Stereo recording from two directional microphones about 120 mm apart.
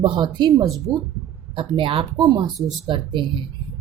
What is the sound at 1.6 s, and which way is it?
A woman's voice, 45° right (ahead or behind).